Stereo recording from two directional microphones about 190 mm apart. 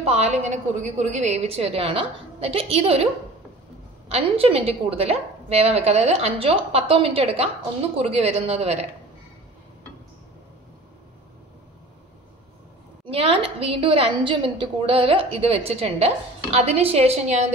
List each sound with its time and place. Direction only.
0.0 s a woman's voice: 35° right (ahead or behind)
4.1 s a woman's voice: 30° right (ahead or behind)
13.1 s a woman's voice: 30° right (ahead or behind)